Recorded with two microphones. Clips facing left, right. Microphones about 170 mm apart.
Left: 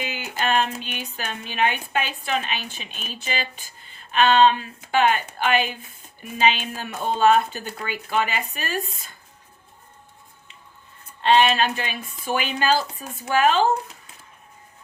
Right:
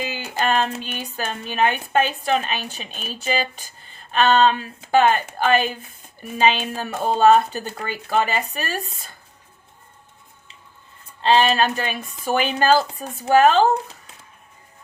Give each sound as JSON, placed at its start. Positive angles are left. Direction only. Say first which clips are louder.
{"t": 0.0, "sound": "speech", "louder": "right 3 dB", "side_deg": -35}
{"t": 11.2, "sound": "speech", "louder": "right 1 dB", "side_deg": -35}